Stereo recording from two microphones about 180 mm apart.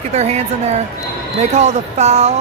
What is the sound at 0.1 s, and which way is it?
Speech, 40° right (ahead or behind).